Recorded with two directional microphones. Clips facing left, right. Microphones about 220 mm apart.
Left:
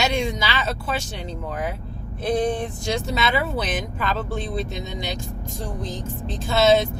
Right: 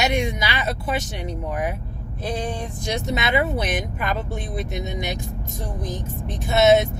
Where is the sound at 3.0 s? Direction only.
20° right (ahead or behind).